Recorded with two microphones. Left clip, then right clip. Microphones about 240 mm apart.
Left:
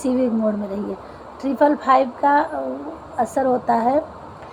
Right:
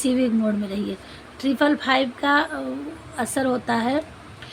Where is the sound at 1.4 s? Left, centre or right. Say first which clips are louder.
Left 3 dB; right.